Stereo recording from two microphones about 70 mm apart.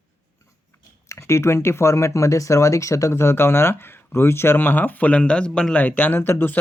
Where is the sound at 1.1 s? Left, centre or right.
Left; by 5.8 s centre.